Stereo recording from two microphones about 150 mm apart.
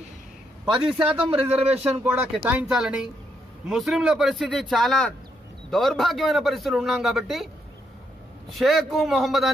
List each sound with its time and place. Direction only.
0.7 s a man's voice: 5° right (ahead or behind)
1.5 s speech: 45° right (ahead or behind)
1.8 s a man's voice: 10° right (ahead or behind)
8.5 s a man's voice: centre (ahead or behind)